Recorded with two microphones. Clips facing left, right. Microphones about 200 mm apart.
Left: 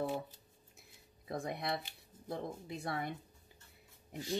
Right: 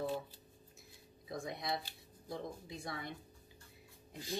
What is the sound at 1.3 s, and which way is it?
Speech, 60° left (ahead or behind).